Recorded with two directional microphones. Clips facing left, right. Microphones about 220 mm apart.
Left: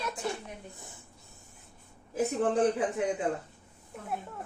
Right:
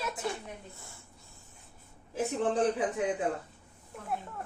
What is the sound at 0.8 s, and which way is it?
Speech, 20° left (ahead or behind).